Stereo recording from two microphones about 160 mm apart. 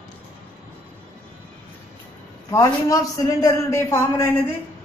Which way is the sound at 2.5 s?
20° left (ahead or behind).